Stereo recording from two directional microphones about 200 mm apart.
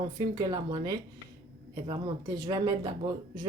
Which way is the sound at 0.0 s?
20° right (ahead or behind).